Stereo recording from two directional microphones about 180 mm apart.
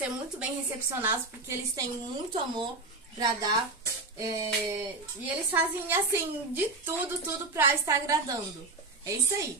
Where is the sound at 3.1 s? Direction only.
20° right (ahead or behind).